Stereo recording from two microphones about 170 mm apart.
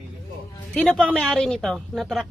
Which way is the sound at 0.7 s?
5° left (ahead or behind).